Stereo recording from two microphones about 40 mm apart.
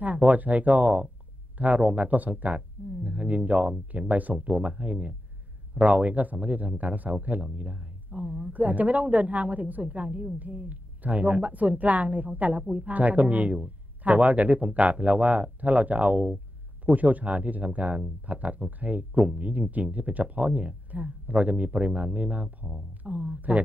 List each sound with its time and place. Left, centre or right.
0.0 s a man's voice: right
16.8 s speech: right